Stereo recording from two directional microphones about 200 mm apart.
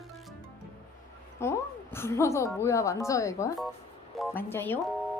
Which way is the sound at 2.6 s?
15° left (ahead or behind).